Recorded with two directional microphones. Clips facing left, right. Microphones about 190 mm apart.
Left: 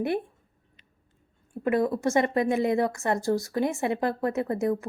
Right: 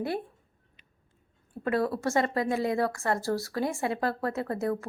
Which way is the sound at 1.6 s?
20° left (ahead or behind).